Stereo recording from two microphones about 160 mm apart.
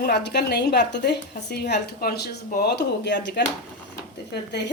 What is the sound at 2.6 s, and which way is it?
Speech, 90° left.